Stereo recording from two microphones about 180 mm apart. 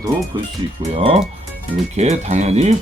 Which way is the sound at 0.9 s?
35° right (ahead or behind).